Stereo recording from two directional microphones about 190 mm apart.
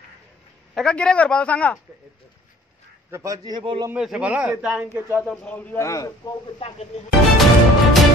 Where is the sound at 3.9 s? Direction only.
5° right (ahead or behind).